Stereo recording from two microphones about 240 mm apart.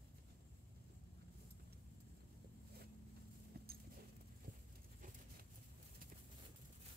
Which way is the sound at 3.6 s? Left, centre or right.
Right.